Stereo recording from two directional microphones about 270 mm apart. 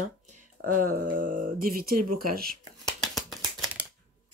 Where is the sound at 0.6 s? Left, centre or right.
Right.